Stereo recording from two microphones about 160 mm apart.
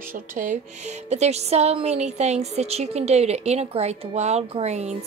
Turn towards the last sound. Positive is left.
turn(degrees=-45)  # may be behind; listen again after turning